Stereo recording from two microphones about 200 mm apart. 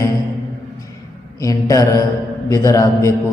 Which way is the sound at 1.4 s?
15° left (ahead or behind).